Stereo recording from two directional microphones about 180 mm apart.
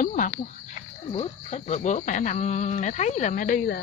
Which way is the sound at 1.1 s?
35° left (ahead or behind).